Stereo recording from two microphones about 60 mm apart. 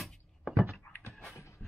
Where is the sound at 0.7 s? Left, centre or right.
Left.